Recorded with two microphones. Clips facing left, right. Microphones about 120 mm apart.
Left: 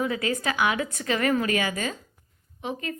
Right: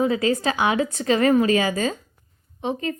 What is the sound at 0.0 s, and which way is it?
A woman's voice, 30° right (ahead or behind).